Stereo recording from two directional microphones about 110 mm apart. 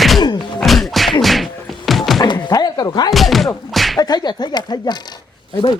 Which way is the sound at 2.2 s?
45° left (ahead or behind).